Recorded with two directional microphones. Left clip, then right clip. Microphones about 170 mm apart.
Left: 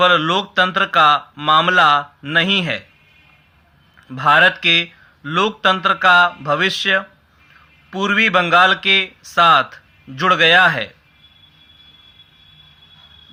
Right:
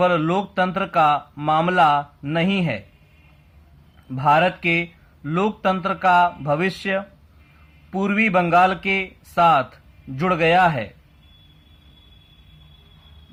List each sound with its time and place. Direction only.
0.0 s speech: 10° left (ahead or behind)
4.1 s a man's voice: 15° left (ahead or behind)